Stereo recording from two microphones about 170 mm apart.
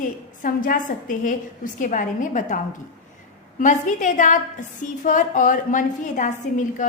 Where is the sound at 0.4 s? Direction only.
55° left (ahead or behind).